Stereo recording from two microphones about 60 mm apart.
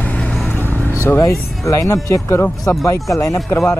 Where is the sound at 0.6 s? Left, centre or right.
Right.